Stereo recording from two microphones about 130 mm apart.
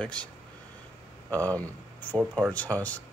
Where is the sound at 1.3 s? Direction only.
10° left (ahead or behind).